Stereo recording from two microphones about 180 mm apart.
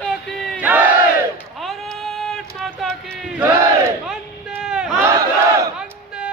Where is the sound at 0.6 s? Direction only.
10° right (ahead or behind).